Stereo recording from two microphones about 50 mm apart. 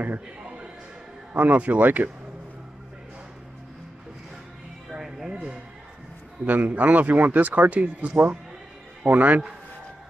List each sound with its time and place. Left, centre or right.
1.3 s speech: right
4.9 s music: centre
5.3 s a sound: centre
6.4 s a man's voice: right